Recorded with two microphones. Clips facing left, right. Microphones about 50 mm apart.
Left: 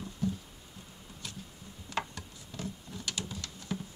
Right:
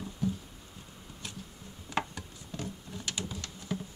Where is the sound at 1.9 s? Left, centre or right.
Centre.